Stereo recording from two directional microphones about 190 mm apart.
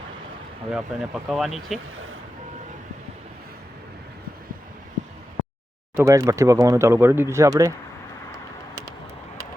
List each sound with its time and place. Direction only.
0.7 s speech: 5° right (ahead or behind)
6.0 s speech: 15° right (ahead or behind)